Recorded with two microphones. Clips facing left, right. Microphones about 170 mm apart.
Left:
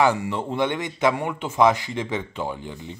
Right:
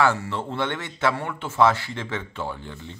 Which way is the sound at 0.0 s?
15° left (ahead or behind).